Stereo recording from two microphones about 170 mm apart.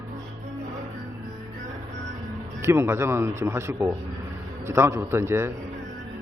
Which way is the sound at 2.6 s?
15° right (ahead or behind).